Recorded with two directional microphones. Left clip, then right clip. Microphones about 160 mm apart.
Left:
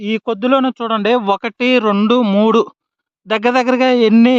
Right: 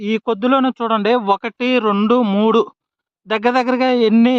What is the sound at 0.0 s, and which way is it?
Speech, 10° left (ahead or behind).